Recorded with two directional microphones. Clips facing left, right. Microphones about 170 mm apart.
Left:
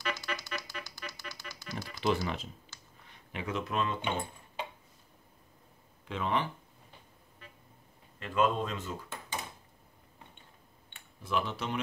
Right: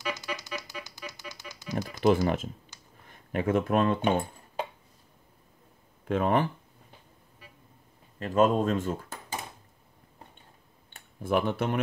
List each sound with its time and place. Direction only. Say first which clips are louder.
0.1 s typewriter: right 2 dB; 20° right (ahead or behind)
1.8 s speech: right 8 dB; 45° right (ahead or behind)
2.7 s a sound: right 1 dB; 15° right (ahead or behind)
3.1 s speech: right 10 dB; 50° right (ahead or behind)
6.0 s speech: right 7 dB; 50° right (ahead or behind)
8.2 s speech: right 6 dB; 40° right (ahead or behind)
10.9 s a sound: right 8 dB; 50° right (ahead or behind)